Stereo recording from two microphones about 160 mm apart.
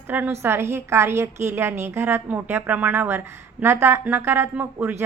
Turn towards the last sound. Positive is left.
turn(degrees=-15)  # may be behind; listen again after turning